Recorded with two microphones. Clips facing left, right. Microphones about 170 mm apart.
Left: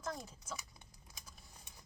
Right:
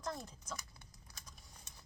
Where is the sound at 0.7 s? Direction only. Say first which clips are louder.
Even; 20° left (ahead or behind).